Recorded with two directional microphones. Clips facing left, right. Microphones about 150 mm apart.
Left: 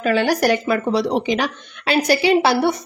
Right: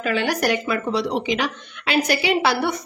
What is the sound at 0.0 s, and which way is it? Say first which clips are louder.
Speech: left 4 dB; 40° left (ahead or behind).